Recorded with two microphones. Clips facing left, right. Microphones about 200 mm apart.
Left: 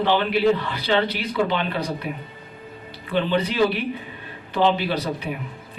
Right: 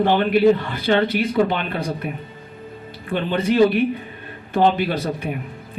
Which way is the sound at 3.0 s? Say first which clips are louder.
Right 1 dB; 50° right (ahead or behind).